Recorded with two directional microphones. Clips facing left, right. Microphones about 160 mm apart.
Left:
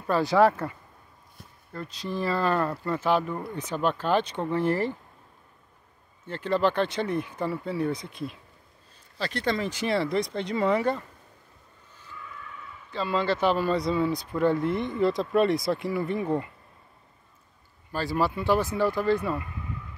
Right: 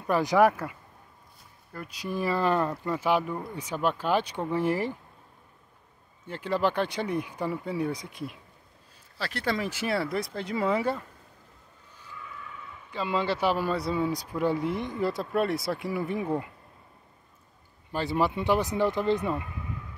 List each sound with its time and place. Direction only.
0.0 s speech: 15° right (ahead or behind)
6.2 s speech: 10° right (ahead or behind)
12.9 s speech: 15° right (ahead or behind)
17.9 s speech: 20° right (ahead or behind)